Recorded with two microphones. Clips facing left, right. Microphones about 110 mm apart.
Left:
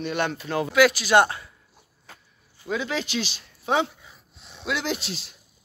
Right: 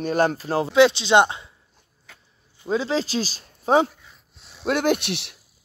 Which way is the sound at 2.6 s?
30° right (ahead or behind).